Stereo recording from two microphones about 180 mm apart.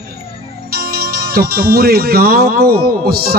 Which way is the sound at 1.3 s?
60° right (ahead or behind).